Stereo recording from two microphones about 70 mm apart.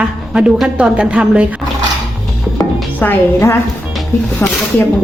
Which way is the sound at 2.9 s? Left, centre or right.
Left.